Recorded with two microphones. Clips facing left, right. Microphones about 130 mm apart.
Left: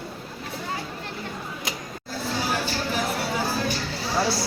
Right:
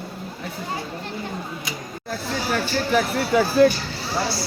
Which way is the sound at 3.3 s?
65° right (ahead or behind).